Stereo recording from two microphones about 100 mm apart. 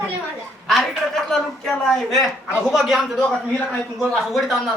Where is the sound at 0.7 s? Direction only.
Centre (ahead or behind).